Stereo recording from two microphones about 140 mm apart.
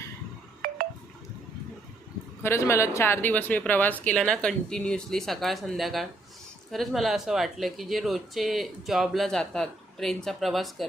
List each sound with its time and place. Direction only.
0.6 s telephone dialing: 90° right
2.4 s speech: 20° left (ahead or behind); by 10.8 s centre (ahead or behind)